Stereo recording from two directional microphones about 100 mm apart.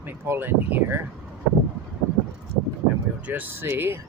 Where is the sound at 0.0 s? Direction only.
20° right (ahead or behind).